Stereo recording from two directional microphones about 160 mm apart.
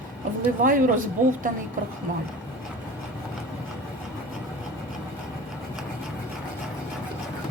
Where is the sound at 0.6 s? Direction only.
60° right (ahead or behind).